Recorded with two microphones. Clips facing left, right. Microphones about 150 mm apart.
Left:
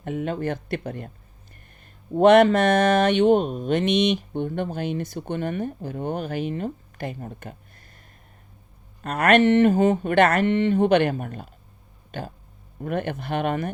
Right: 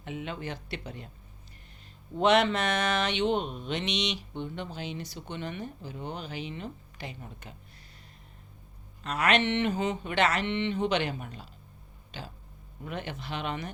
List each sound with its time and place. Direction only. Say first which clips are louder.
0.0 s speech: left 10 dB; 50° left (ahead or behind)
2.1 s speech: left 9 dB; 50° left (ahead or behind)
9.0 s speech: left 9 dB; 55° left (ahead or behind)